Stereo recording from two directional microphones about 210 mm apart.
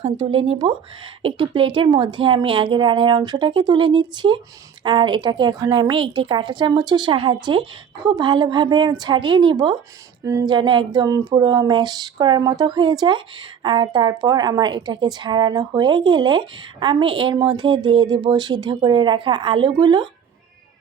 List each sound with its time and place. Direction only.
0.0 s speech: 25° right (ahead or behind)